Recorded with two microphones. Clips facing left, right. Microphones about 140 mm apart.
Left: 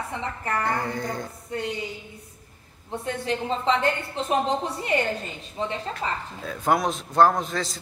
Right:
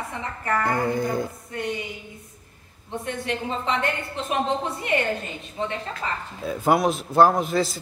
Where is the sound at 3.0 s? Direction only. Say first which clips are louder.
Left 1 dB; 30° left (ahead or behind).